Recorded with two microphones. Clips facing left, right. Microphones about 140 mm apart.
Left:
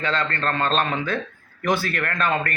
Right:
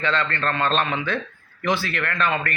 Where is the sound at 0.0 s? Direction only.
40° left (ahead or behind).